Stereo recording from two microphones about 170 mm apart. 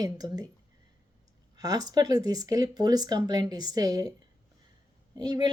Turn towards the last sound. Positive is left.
turn(degrees=-25)  # may be behind; listen again after turning